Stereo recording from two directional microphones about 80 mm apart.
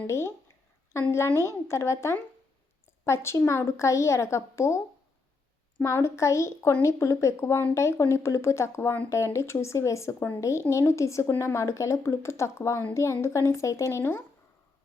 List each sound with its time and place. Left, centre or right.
0.1 s speech: left
1.4 s speech: left
5.8 s speech: left